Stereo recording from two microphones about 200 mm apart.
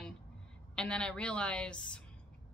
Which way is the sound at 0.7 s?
5° left (ahead or behind).